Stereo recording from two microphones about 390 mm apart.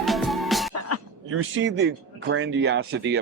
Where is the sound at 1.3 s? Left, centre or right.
Right.